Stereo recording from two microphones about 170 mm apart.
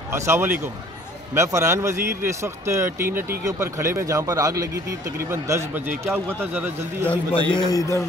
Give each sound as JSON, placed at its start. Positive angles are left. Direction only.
{"t": 0.1, "sound": "a man's voice", "side_deg": -15}
{"t": 7.5, "sound": "a man's voice", "side_deg": 20}